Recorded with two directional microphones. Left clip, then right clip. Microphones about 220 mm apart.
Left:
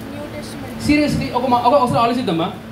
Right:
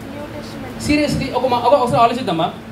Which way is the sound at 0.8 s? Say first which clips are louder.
Left 1 dB; 20° right (ahead or behind).